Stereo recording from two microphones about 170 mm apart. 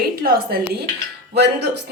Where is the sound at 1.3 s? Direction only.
80° right.